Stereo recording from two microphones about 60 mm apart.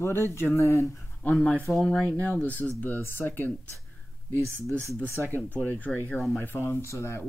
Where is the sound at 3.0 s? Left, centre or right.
Left.